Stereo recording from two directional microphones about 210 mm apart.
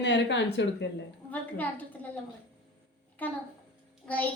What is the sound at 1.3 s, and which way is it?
Speech, 10° left (ahead or behind).